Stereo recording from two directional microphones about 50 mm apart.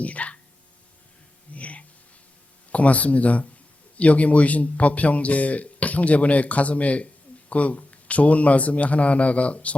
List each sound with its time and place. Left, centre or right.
0.0 s a man's voice: left
1.5 s a man's voice: left